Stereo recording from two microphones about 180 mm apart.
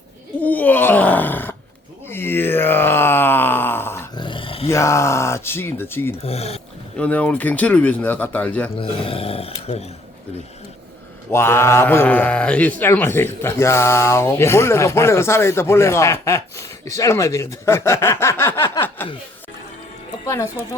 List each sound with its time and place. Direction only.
0.4 s groan: 10° left (ahead or behind)
4.1 s dog: 25° left (ahead or behind)
4.7 s speech: 15° left (ahead or behind)
6.2 s speech: 35° left (ahead or behind)
6.9 s speech: 5° left (ahead or behind)
8.7 s speech: 30° left (ahead or behind)
11.3 s speech: 15° left (ahead or behind)
20.2 s speech: 15° left (ahead or behind)